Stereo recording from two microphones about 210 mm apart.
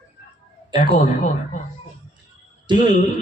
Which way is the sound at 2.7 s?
20° right (ahead or behind).